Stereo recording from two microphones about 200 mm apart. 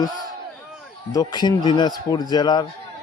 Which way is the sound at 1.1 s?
20° left (ahead or behind).